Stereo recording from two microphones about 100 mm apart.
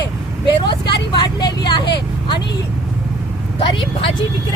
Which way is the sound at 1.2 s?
45° left (ahead or behind).